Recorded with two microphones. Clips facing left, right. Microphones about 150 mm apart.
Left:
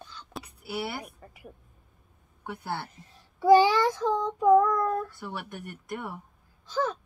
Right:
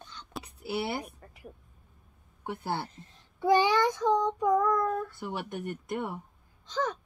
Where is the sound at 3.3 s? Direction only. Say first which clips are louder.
Left 5 dB; 10° left (ahead or behind).